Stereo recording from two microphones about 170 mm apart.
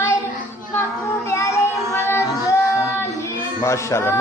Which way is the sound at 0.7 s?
15° left (ahead or behind).